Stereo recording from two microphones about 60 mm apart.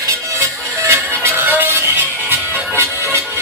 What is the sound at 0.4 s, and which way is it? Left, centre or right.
Music, right.